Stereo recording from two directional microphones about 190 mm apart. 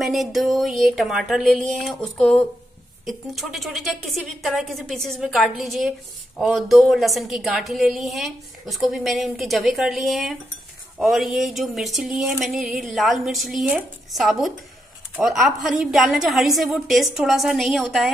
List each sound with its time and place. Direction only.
0.0 s a woman's voice: centre (ahead or behind)